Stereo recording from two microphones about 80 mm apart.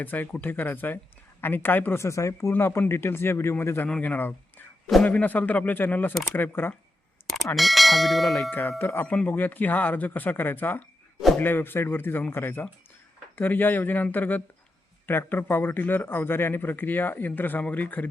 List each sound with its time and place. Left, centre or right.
0.0 s speech: left
7.5 s bell: centre
8.4 s speech: centre
8.8 s speech: left